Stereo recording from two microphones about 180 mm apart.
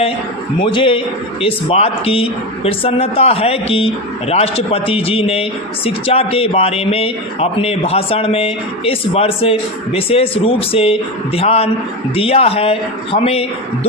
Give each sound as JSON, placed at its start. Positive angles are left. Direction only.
{"t": 0.6, "sound": "speech", "side_deg": 30}